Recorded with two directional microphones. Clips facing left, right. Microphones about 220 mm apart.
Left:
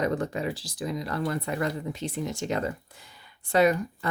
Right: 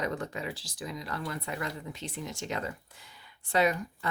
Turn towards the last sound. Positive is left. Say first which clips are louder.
# left 5 dB
turn(degrees=45)  # may be behind; listen again after turning